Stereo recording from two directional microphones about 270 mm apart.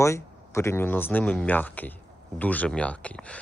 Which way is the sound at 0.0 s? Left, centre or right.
Centre.